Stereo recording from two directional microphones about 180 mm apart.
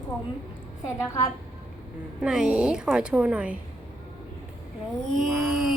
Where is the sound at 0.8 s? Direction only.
20° left (ahead or behind).